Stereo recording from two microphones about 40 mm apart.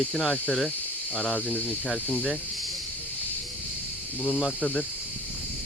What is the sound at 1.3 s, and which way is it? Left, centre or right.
Cricket, left.